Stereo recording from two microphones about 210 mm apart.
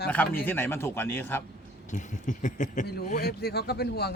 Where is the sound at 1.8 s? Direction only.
35° left (ahead or behind).